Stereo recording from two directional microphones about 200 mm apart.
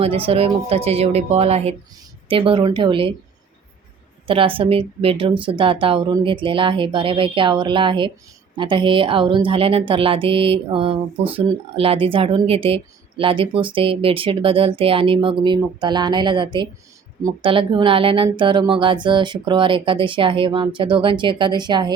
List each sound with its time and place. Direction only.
0.0 s a woman's voice: 30° right (ahead or behind)
4.3 s a woman's voice: 25° right (ahead or behind)